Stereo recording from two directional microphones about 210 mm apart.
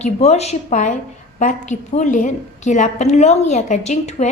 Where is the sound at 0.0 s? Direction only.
30° left (ahead or behind).